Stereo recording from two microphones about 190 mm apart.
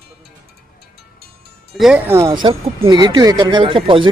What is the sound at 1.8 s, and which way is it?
Speech, 10° right (ahead or behind).